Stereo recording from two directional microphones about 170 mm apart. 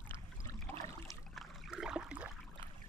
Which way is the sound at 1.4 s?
Centre (ahead or behind).